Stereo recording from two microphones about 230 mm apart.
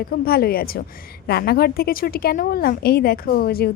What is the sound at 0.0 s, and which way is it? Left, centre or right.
A woman's voice, left.